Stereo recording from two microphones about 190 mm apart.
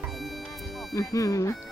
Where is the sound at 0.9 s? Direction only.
15° left (ahead or behind).